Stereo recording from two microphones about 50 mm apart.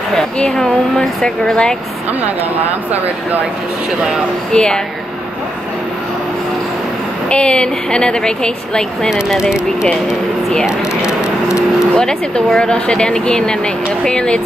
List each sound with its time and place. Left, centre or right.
0.4 s a woman's voice: centre
4.5 s a woman's voice: centre
7.2 s a woman's voice: left
9.4 s speech: centre
11.0 s vehicle: centre
11.9 s a woman's voice: centre